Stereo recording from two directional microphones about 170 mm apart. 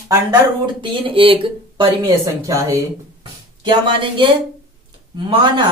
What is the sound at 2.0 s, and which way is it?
Speech, 20° right (ahead or behind).